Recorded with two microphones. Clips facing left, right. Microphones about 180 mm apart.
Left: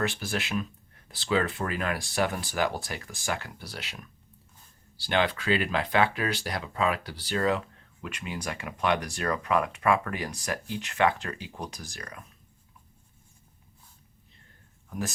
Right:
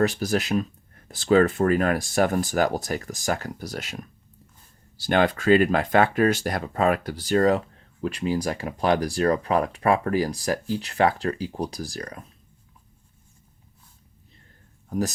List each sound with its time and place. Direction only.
0.0 s speech: 40° right (ahead or behind)
14.8 s speech: 40° right (ahead or behind)